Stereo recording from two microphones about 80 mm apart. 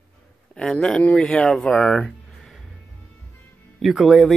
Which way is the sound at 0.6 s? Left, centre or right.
Centre.